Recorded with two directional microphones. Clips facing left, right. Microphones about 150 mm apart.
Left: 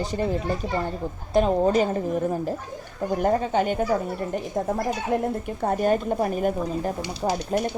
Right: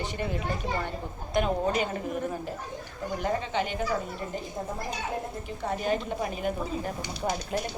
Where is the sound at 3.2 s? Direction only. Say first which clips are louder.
Left 7 dB; 50° left (ahead or behind).